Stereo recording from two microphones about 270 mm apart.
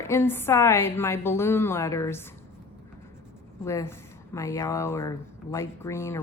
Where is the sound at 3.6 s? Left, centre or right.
Centre.